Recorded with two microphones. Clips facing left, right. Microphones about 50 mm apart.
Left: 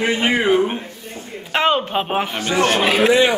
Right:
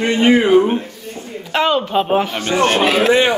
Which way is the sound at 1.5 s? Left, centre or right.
Centre.